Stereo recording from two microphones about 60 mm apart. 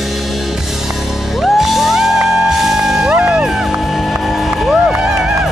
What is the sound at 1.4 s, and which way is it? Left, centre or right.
Music, centre.